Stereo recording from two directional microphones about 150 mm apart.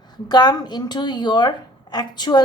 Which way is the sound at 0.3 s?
30° left (ahead or behind).